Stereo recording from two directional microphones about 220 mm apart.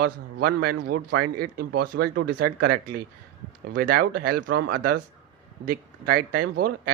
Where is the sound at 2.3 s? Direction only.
45° right (ahead or behind).